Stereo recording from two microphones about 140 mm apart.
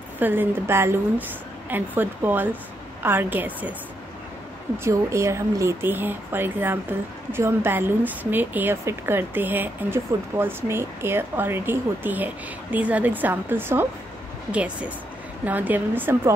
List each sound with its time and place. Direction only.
0.2 s speech: 15° right (ahead or behind)
4.7 s speech: 20° right (ahead or behind)